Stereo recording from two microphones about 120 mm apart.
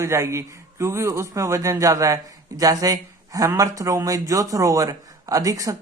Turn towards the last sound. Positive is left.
turn(degrees=-30)  # may be behind; listen again after turning